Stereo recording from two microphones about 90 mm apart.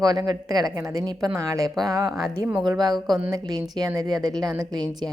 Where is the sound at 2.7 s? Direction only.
50° right (ahead or behind).